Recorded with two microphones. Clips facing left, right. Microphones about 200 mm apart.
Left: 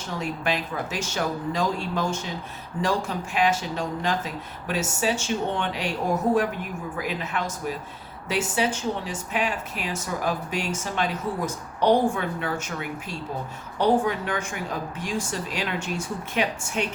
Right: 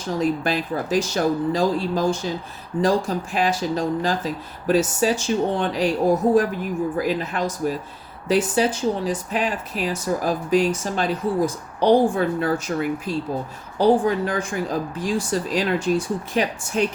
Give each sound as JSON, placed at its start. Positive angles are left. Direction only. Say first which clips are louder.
{"t": 0.1, "sound": "speech", "louder": "right 6 dB", "side_deg": -35}